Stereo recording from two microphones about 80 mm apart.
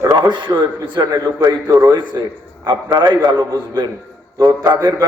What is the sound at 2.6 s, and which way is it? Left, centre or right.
Speech, right.